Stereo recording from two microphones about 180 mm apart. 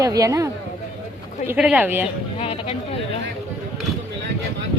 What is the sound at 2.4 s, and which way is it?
Speech, 35° left (ahead or behind).